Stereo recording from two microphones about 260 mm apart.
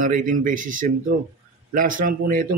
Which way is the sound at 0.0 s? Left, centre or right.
Right.